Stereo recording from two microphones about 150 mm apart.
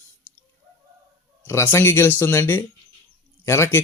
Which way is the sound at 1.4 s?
15° left (ahead or behind).